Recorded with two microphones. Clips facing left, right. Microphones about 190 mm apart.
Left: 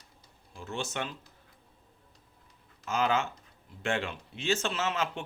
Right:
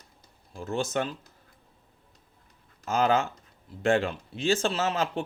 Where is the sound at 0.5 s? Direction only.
40° right (ahead or behind).